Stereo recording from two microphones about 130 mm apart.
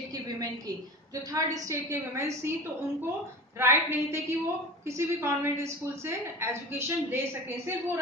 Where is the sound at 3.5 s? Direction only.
20° right (ahead or behind).